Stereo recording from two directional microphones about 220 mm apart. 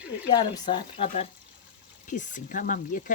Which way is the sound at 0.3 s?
20° left (ahead or behind).